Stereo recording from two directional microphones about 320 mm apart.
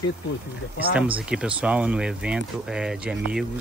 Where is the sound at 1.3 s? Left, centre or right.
Centre.